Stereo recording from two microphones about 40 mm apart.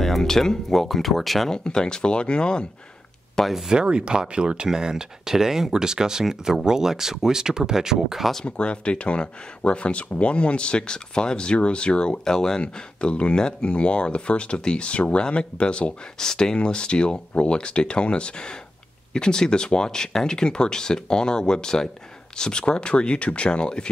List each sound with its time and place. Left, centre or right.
0.2 s speech: centre
1.5 s speech: centre
3.6 s speech: right
8.5 s speech: left
12.3 s speech: centre
16.2 s speech: centre